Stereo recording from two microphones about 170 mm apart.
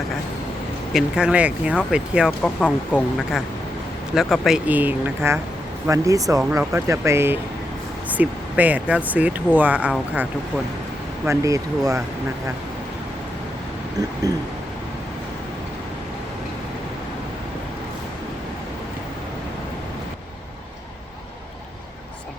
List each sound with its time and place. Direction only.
0.9 s speech: 5° right (ahead or behind)
4.1 s speech: centre (ahead or behind)
11.3 s speech: 20° right (ahead or behind)